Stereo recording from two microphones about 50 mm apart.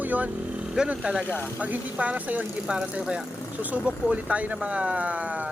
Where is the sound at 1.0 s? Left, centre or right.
Centre.